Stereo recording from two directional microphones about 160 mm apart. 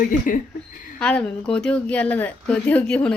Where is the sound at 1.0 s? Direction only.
5° left (ahead or behind).